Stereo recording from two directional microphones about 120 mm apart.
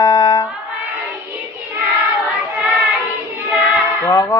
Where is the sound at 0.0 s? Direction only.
30° left (ahead or behind).